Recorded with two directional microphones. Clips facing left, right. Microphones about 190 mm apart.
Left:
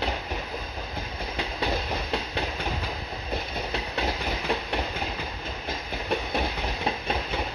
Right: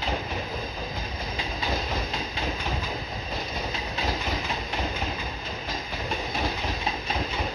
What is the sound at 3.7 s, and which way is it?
Train, 65° left (ahead or behind).